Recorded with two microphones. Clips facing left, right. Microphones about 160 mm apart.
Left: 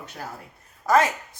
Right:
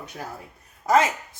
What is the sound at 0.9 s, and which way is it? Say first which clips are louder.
Speech: even; 20° right (ahead or behind).